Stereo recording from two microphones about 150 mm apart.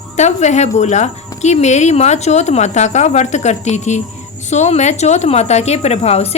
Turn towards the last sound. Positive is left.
turn(degrees=45)  # may be behind; listen again after turning